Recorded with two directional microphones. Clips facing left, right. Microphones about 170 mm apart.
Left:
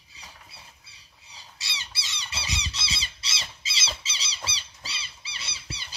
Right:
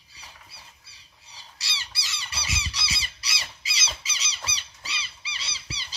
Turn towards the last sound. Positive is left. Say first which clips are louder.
# even
turn(degrees=55)  # may be behind; listen again after turning